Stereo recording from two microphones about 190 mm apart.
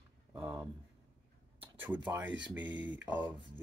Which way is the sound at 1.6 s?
10° right (ahead or behind).